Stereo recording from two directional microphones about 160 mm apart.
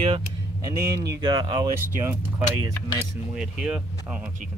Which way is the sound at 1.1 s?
25° right (ahead or behind).